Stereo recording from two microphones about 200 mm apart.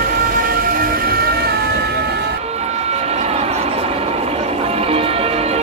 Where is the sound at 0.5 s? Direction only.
50° right (ahead or behind).